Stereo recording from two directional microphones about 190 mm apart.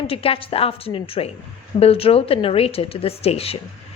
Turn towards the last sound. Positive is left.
turn(degrees=30)  # may be behind; listen again after turning